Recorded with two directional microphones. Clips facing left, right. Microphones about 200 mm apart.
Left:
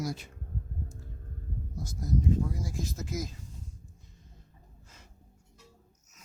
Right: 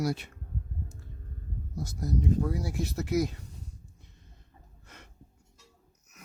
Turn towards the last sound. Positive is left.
turn(degrees=-70)  # may be behind; listen again after turning